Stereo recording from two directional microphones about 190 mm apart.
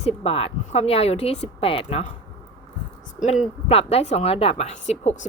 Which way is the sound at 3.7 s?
35° left (ahead or behind).